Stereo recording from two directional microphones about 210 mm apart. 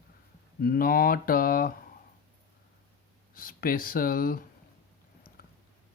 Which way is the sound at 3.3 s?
45° left (ahead or behind).